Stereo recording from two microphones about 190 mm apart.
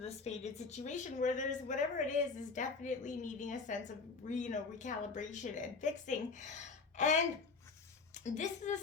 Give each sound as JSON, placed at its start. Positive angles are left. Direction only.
{"t": 0.0, "sound": "a woman's voice", "side_deg": 35}